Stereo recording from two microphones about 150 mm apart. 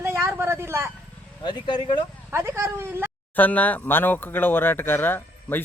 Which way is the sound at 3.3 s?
10° left (ahead or behind).